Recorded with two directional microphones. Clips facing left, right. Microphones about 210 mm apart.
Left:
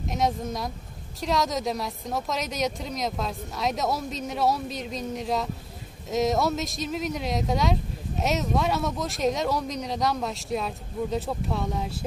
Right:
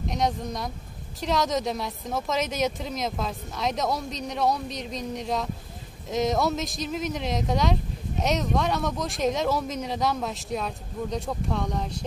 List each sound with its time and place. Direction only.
0.1 s a woman's voice: centre (ahead or behind)